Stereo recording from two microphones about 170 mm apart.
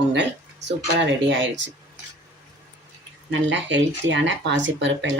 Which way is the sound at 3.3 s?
90° right.